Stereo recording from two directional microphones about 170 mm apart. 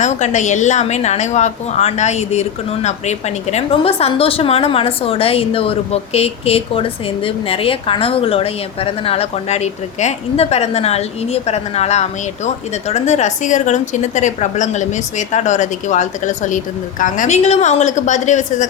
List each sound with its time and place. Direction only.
0.0 s a woman's voice: 45° left (ahead or behind)